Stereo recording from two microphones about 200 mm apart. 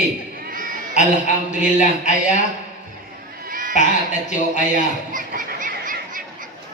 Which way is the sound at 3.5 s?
45° right (ahead or behind).